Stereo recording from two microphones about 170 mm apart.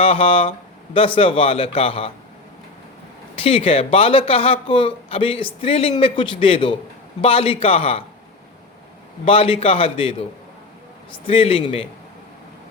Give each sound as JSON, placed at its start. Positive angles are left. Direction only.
{"t": 0.0, "sound": "speech", "side_deg": 35}
{"t": 3.4, "sound": "speech", "side_deg": 35}
{"t": 9.2, "sound": "speech", "side_deg": 30}